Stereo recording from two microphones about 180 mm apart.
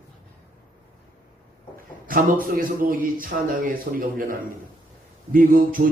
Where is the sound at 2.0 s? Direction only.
50° right (ahead or behind).